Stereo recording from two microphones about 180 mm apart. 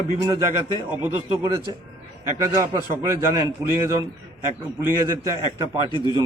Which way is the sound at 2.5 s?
20° right (ahead or behind).